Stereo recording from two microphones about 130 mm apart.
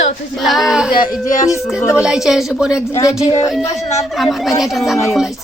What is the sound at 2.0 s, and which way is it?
Speech, 5° right (ahead or behind).